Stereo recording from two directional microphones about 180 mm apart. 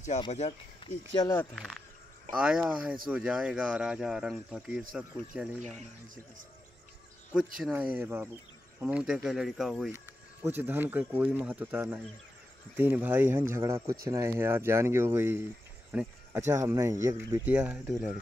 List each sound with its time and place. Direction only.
0.3 s speech: 40° left (ahead or behind)
0.8 s speech: 25° left (ahead or behind)
1.1 s speech: 15° left (ahead or behind); by 5.6 s 5° right (ahead or behind)
7.6 s speech: 5° right (ahead or behind)
10.4 s speech: 10° right (ahead or behind)